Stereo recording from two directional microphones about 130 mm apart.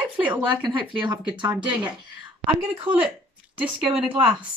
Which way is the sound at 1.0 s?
35° right (ahead or behind).